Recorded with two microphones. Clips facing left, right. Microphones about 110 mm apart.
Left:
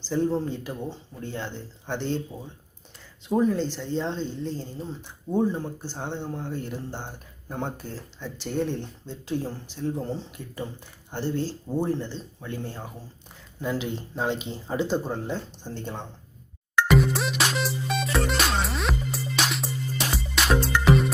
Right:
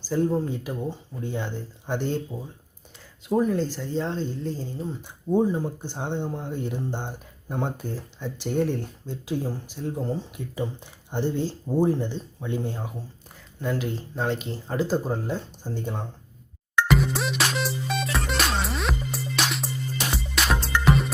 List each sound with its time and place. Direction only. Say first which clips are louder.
0.0 s speech: right 1 dB; 5° right (ahead or behind)
13.6 s speech: right 1 dB; centre (ahead or behind)
16.9 s music: left 3 dB; centre (ahead or behind)